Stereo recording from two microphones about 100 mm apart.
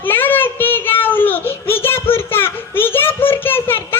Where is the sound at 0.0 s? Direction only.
20° left (ahead or behind).